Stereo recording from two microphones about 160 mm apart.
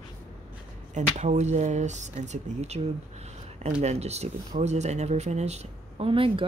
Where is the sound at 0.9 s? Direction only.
45° right (ahead or behind).